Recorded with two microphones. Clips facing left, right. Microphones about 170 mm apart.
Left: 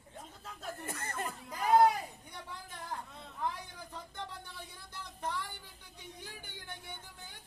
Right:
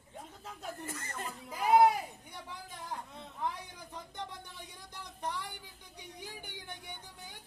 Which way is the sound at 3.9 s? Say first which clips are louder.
Right 2 dB; 15° right (ahead or behind).